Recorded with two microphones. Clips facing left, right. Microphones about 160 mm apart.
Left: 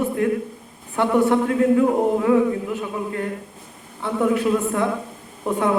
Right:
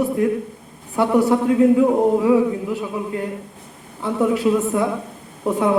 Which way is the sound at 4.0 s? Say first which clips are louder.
Right 2 dB; 5° right (ahead or behind).